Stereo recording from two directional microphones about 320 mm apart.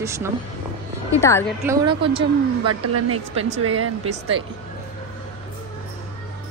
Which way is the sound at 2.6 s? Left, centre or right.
Right.